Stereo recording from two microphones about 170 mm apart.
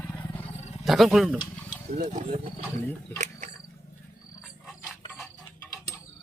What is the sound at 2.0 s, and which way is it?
Speech, 40° right (ahead or behind).